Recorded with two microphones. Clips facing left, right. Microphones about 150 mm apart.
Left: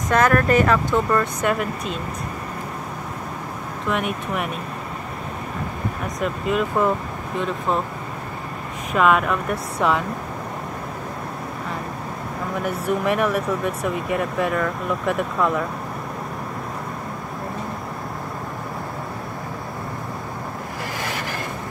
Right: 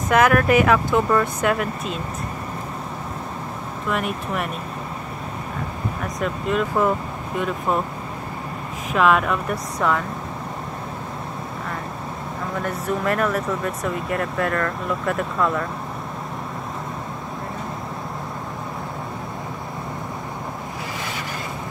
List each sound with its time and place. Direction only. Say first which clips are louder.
0.1 s speech: right 1 dB; 5° right (ahead or behind)
3.9 s speech: left 1 dB; centre (ahead or behind)
6.2 s speech: left 1 dB; centre (ahead or behind)
8.9 s speech: even; centre (ahead or behind)
9.8 s speech: left 1 dB; 20° left (ahead or behind)
13.0 s speech: even; 5° left (ahead or behind)